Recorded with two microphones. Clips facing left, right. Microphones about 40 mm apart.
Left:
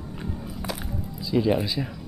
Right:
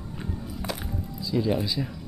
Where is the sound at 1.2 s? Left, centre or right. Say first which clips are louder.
Left 3 dB; centre.